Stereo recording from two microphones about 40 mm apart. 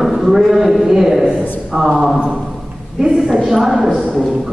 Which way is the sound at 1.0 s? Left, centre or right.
Centre.